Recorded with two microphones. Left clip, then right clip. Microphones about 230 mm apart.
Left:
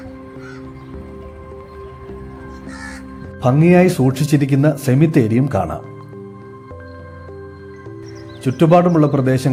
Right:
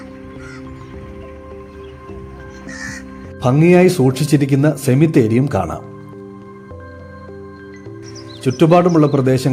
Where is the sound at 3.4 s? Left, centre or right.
Centre.